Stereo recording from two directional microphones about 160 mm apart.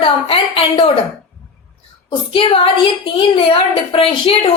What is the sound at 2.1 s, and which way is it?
A woman's voice, 30° left (ahead or behind).